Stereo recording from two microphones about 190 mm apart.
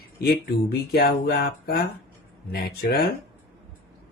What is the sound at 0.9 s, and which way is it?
Speech, 55° left (ahead or behind).